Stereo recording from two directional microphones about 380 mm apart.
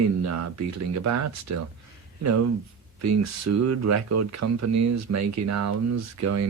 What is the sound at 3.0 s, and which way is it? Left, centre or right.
Speech, right.